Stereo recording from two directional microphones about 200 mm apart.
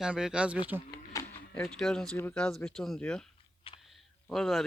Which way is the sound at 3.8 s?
Centre (ahead or behind).